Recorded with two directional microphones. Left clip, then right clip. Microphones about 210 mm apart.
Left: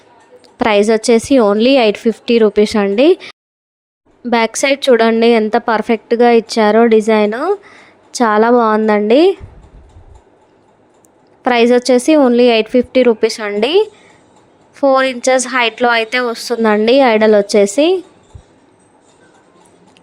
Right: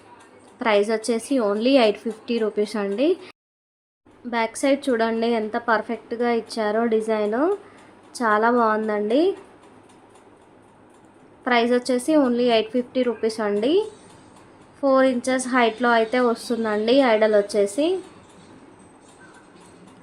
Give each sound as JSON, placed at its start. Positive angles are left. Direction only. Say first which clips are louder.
{"t": 0.6, "sound": "a woman's voice", "louder": "left 9 dB", "side_deg": 40}
{"t": 11.4, "sound": "a woman's voice", "louder": "left 10 dB", "side_deg": 40}